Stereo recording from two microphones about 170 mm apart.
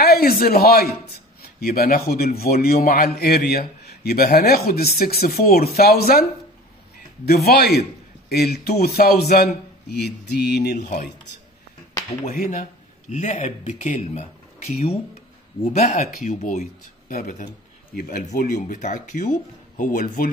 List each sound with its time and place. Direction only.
0.0 s a man's voice: 65° left (ahead or behind)
7.2 s mantra: 70° left (ahead or behind)
12.3 s a man's voice: 60° left (ahead or behind)
13.1 s speech: 40° left (ahead or behind)